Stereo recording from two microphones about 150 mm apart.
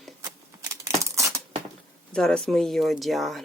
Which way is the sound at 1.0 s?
20° right (ahead or behind).